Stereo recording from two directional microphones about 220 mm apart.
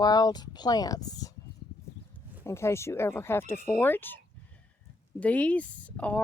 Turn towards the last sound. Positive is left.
turn(degrees=5)  # may be behind; listen again after turning